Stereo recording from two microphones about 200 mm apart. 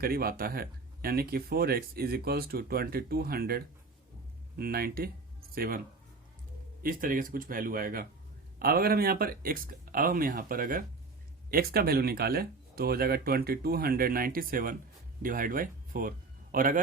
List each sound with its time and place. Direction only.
0.0 s speech: 50° right (ahead or behind)
6.8 s a man's voice: 45° right (ahead or behind)